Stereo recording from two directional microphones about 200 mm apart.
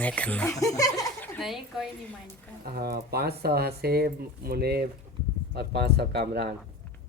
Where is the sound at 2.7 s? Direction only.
50° right (ahead or behind).